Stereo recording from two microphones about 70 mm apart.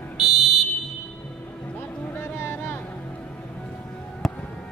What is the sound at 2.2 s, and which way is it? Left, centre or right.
Vehicle, left.